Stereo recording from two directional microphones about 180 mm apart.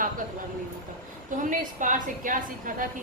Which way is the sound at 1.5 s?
45° right (ahead or behind).